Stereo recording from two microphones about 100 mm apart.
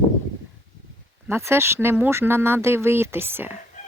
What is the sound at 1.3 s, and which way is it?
Speech, 25° right (ahead or behind).